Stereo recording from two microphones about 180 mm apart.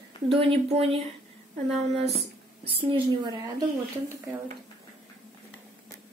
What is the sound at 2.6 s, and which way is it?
A woman's voice, 30° right (ahead or behind).